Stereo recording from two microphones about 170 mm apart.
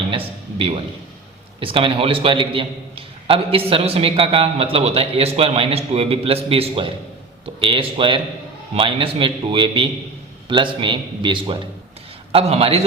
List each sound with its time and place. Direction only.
0.1 s a man's voice: 30° right (ahead or behind)